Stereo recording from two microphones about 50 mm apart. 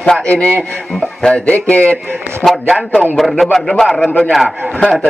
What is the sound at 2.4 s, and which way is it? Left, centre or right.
A man's voice, centre.